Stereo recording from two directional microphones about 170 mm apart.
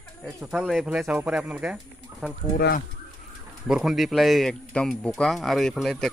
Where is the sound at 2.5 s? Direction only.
70° left (ahead or behind).